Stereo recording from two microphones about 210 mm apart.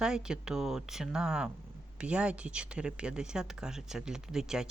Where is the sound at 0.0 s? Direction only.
5° right (ahead or behind).